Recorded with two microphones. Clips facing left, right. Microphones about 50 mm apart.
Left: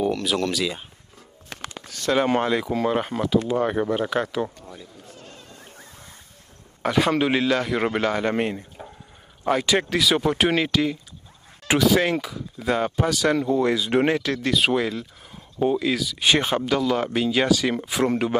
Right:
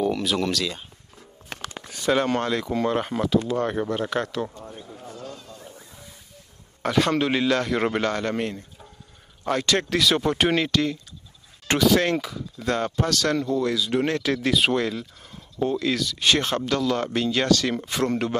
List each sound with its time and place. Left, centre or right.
0.1 s speech: centre
1.9 s a sound: centre
2.1 s speech: centre
3.3 s speech: centre
4.6 s a sound: right
5.3 s fowl: left
6.8 s speech: centre
13.6 s speech: left
14.2 s speech: centre